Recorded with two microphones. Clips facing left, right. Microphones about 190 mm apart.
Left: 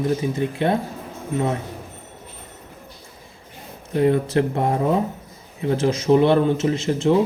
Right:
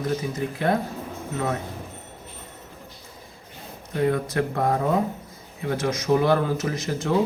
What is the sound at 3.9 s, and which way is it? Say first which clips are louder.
A man's voice: left 5 dB; 30° left (ahead or behind).